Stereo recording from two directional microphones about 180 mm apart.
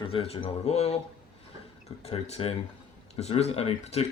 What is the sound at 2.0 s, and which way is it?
Speech, 35° left (ahead or behind).